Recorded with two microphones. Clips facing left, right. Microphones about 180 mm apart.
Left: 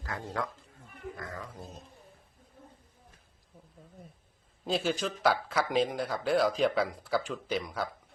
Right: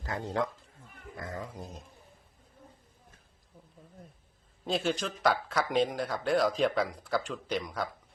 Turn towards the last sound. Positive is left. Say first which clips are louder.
# even
turn(degrees=0)  # may be behind; listen again after turning